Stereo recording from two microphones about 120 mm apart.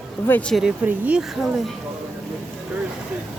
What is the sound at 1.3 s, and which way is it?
Speech, centre (ahead or behind).